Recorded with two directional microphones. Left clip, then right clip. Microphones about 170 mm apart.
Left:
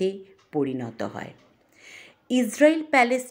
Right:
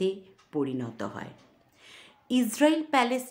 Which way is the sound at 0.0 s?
15° left (ahead or behind).